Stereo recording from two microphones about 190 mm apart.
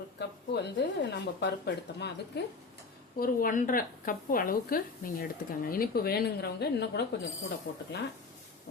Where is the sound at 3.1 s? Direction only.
50° left (ahead or behind).